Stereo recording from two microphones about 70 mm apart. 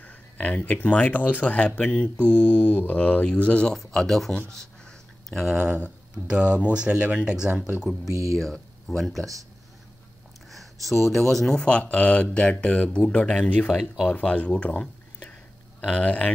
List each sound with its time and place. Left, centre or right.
0.0 s speech: centre
3.7 s speech: centre
4.6 s a sound: centre
5.5 s speech: centre
8.1 s speech: right
8.4 s speech: centre
9.2 s speech: right
10.5 s speech: centre
13.7 s speech: centre
14.0 s speech: centre